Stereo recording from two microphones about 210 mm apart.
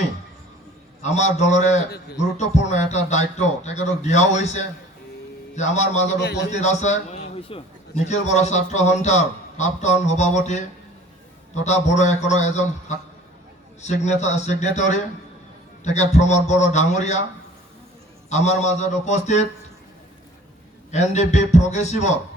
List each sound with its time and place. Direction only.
1.0 s a man's voice: 35° left (ahead or behind)
6.1 s a man's voice: 55° left (ahead or behind)
6.5 s a man's voice: 35° left (ahead or behind)
13.8 s a man's voice: 35° left (ahead or behind)
18.3 s a man's voice: 35° left (ahead or behind)
20.9 s a man's voice: 35° left (ahead or behind)